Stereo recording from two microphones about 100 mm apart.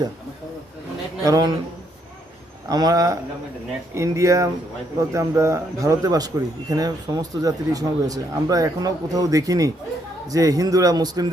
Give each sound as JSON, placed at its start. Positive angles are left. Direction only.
{"t": 1.2, "sound": "a man's voice", "side_deg": -40}
{"t": 2.6, "sound": "a man's voice", "side_deg": -40}